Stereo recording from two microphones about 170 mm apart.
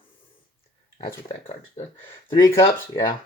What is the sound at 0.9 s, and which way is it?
Speech, 30° left (ahead or behind).